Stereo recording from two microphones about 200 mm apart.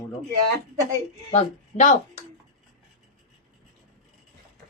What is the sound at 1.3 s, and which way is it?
Speech, 40° left (ahead or behind).